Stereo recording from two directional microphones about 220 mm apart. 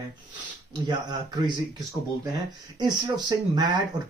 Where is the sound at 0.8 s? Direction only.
20° right (ahead or behind).